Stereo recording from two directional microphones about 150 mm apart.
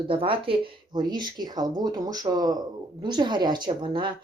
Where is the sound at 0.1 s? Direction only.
35° right (ahead or behind).